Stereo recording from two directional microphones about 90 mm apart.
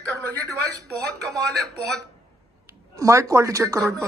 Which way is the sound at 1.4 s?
Centre (ahead or behind).